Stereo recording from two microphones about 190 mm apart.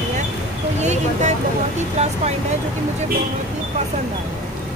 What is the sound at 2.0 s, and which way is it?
Speech, 35° right (ahead or behind).